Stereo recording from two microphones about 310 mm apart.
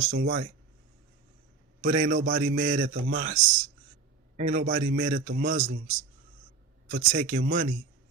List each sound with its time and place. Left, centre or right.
0.1 s a man's voice: right
1.8 s a man's voice: right
4.4 s a man's voice: right
6.9 s a man's voice: right